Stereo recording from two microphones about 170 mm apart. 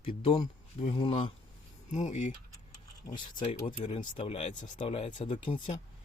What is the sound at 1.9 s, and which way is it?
Speech, 45° left (ahead or behind).